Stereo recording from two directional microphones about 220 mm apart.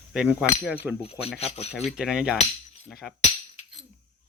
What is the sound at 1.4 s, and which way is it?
Speech, 30° left (ahead or behind).